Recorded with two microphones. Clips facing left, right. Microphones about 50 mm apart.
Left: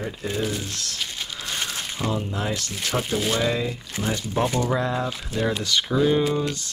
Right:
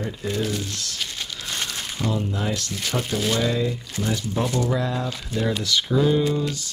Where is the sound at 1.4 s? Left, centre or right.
Centre.